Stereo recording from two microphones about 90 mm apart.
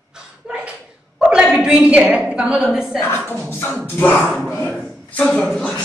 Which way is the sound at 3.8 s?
20° left (ahead or behind).